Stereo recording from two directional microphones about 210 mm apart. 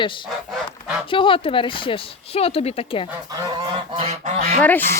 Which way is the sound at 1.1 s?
25° left (ahead or behind).